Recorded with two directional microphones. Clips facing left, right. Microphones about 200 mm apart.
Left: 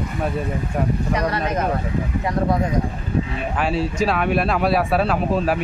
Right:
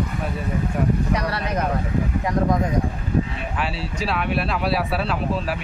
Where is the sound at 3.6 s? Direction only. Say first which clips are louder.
Left 7 dB; 45° left (ahead or behind).